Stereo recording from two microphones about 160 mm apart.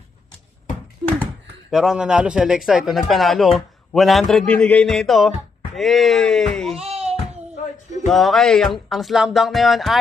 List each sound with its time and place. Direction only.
1.7 s a man's voice: 5° right (ahead or behind)
6.7 s a sound: 40° right (ahead or behind)
8.0 s a man's voice: centre (ahead or behind)